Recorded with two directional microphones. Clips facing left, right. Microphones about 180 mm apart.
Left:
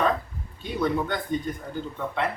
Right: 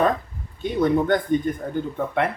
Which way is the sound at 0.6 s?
50° right (ahead or behind).